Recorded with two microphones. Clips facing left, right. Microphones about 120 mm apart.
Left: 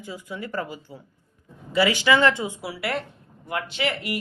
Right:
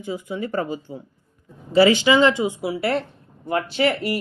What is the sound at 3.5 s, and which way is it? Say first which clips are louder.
Speech: right 7 dB; 35° right (ahead or behind).